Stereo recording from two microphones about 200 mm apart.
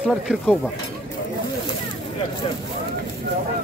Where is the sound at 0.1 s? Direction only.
Centre (ahead or behind).